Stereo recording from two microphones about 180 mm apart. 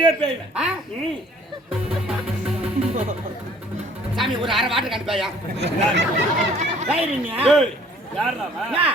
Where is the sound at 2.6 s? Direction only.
35° right (ahead or behind).